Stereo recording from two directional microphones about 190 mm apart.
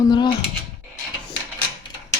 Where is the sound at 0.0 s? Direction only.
25° left (ahead or behind).